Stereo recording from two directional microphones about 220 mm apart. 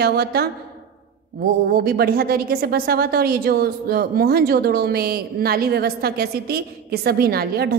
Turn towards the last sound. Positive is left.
turn(degrees=-45)  # may be behind; listen again after turning